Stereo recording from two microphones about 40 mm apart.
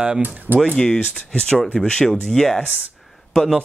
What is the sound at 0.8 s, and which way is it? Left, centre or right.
Speech, centre.